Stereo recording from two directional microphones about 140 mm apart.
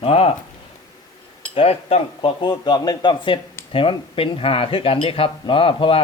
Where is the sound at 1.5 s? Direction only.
45° left (ahead or behind).